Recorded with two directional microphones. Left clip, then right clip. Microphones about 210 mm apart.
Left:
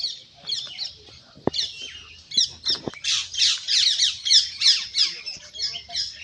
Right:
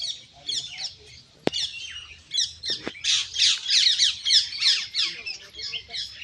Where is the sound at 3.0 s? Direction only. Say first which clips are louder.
Right 1 dB; 25° left (ahead or behind).